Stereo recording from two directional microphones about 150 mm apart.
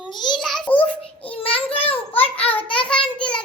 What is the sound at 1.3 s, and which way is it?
Child singing, 35° left (ahead or behind).